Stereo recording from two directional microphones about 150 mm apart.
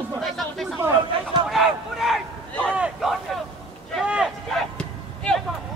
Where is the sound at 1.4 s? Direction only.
Centre (ahead or behind).